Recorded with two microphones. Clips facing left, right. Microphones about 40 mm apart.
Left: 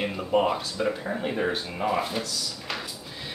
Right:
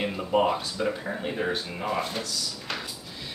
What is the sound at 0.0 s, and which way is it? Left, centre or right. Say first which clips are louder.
Speech: even; centre.